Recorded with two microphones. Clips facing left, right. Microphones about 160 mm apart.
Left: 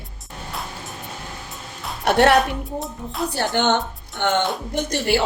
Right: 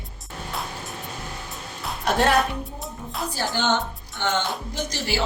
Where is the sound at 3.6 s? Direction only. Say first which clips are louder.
Left 4 dB; 60° left (ahead or behind).